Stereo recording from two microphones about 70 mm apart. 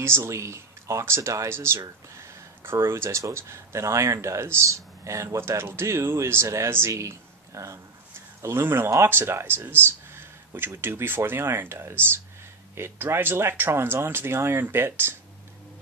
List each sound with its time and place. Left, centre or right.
0.0 s speech: right